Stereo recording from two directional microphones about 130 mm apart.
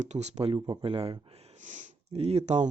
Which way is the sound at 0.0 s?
60° right (ahead or behind).